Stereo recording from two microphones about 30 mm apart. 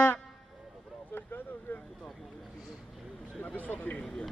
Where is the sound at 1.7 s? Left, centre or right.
Left.